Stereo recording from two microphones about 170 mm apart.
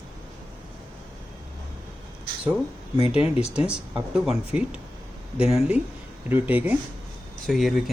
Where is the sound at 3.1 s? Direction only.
5° right (ahead or behind).